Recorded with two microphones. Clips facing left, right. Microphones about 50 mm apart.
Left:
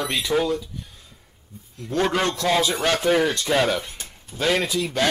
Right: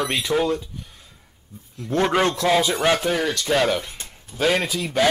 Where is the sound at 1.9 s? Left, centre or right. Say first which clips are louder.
Right 2 dB; centre.